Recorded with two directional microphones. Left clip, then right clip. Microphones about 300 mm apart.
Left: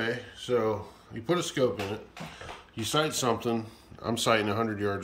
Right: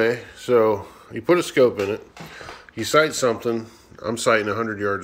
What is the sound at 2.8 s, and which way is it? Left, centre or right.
Speech, centre.